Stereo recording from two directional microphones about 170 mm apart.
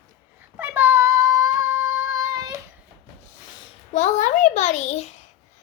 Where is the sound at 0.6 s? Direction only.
15° right (ahead or behind).